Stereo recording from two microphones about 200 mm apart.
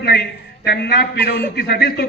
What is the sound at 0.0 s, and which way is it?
A man's voice, 50° left (ahead or behind).